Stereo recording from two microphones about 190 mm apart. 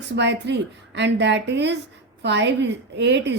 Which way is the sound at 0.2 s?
65° right (ahead or behind).